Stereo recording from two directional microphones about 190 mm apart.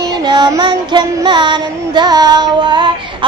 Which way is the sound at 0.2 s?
20° right (ahead or behind).